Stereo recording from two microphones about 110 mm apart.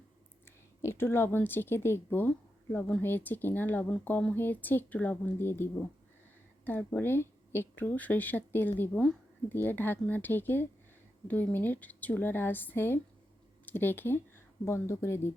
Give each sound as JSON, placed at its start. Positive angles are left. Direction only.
{"t": 0.4, "sound": "speech", "side_deg": 20}